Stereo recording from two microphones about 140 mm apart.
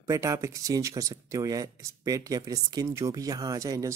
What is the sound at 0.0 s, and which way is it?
Speech, 20° right (ahead or behind).